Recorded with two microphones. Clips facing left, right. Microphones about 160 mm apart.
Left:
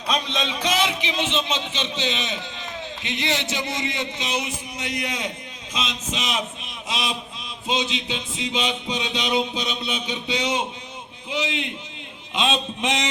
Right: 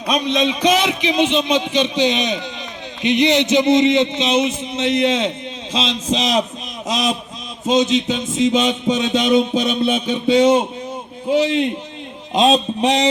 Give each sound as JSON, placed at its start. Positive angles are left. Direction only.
{"t": 0.1, "sound": "a man's voice", "side_deg": -15}
{"t": 7.6, "sound": "music", "side_deg": -45}
{"t": 12.3, "sound": "speech", "side_deg": -40}